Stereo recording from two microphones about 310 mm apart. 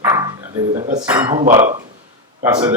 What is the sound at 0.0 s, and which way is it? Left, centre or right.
Speech, centre.